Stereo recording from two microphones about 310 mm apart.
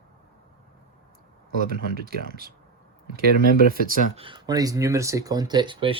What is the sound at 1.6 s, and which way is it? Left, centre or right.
Speech, right.